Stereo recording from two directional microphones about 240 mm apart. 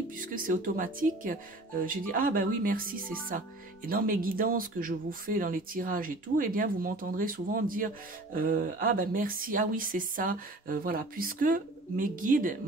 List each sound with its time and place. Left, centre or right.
0.1 s speech: right